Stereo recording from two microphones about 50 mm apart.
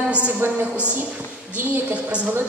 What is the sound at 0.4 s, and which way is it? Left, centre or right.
Speech, right.